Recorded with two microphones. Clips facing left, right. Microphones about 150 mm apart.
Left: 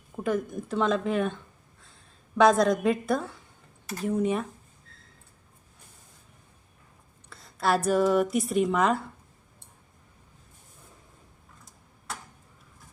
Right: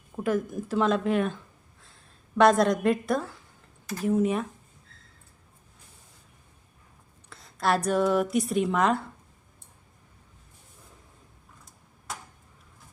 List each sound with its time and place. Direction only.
0.2 s a woman's voice: centre (ahead or behind)
7.3 s a sound: centre (ahead or behind)
7.9 s speech: centre (ahead or behind)